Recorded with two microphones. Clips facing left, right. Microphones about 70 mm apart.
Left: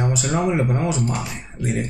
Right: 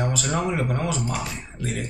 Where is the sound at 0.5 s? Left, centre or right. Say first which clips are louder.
Left 4 dB; left.